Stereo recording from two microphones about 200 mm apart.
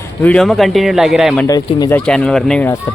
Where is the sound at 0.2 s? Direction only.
5° left (ahead or behind).